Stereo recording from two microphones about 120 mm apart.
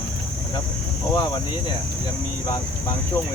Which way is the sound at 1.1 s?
35° left (ahead or behind).